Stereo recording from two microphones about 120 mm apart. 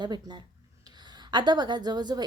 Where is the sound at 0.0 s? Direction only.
40° right (ahead or behind).